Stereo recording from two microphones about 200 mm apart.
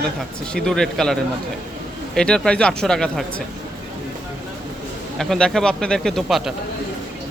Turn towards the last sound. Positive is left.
turn(degrees=0)  # may be behind; listen again after turning